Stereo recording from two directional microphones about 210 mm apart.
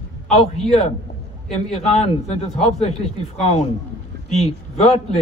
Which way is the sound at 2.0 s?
30° left (ahead or behind).